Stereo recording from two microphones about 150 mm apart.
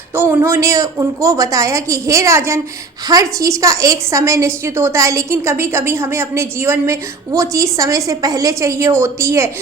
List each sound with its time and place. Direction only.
0.1 s a woman's voice: 15° right (ahead or behind)